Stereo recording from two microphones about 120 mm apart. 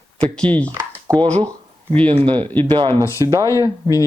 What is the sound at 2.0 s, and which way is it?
Speech, 50° right (ahead or behind).